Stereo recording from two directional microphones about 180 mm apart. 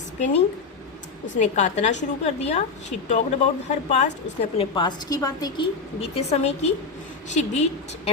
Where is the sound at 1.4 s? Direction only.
40° left (ahead or behind).